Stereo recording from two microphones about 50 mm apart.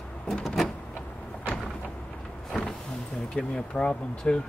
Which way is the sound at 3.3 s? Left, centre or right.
Centre.